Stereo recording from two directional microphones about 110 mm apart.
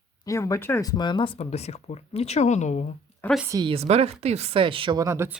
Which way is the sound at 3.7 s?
70° right (ahead or behind).